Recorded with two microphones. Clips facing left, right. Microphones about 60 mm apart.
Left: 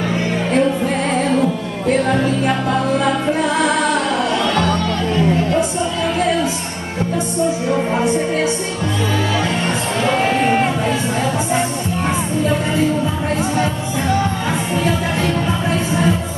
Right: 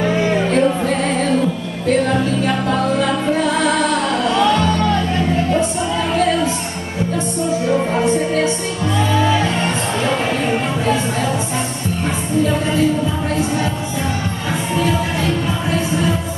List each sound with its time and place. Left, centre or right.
0.5 s music: centre
8.0 s music: centre